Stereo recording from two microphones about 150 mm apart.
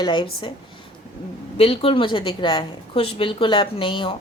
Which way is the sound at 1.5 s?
40° left (ahead or behind).